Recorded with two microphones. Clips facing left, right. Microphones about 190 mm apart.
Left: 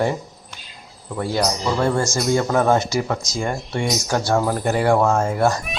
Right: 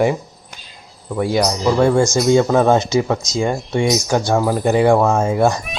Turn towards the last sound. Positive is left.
turn(degrees=-15)  # may be behind; listen again after turning